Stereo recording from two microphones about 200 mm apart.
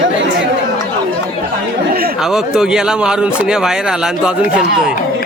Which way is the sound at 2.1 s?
Centre (ahead or behind).